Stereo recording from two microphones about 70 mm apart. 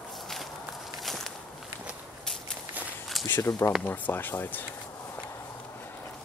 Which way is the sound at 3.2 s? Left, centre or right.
Left.